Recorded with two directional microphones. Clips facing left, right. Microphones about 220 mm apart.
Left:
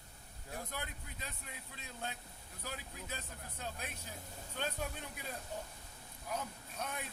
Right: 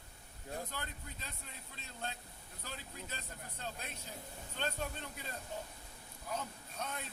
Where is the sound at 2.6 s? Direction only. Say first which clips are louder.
Left 2 dB; 10° left (ahead or behind).